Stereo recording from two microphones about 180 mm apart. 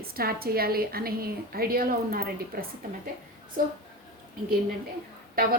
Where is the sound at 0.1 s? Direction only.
55° right (ahead or behind).